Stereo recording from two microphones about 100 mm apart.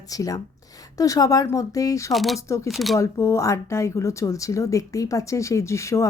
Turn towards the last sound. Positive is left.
turn(degrees=30)  # may be behind; listen again after turning